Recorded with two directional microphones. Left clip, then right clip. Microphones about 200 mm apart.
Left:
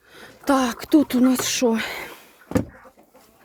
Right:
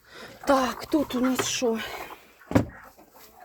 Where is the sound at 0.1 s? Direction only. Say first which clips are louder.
Left 1 dB; 15° left (ahead or behind).